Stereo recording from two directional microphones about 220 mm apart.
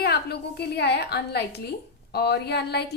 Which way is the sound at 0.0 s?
45° left (ahead or behind).